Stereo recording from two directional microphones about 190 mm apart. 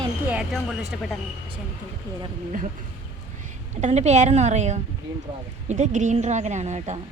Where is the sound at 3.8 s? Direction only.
35° right (ahead or behind).